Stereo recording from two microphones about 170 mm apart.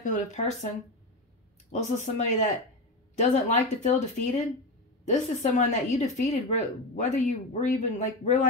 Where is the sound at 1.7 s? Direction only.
45° left (ahead or behind).